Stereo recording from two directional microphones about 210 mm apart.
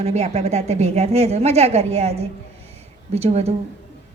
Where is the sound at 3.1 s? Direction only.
30° right (ahead or behind).